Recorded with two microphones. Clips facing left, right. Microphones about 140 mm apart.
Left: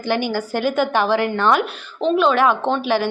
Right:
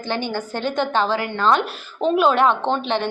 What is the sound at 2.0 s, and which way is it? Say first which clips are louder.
Speech: left 1 dB; 5° right (ahead or behind).